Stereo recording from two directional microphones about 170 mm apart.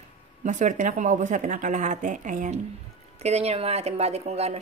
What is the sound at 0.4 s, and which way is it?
Speech, 45° right (ahead or behind).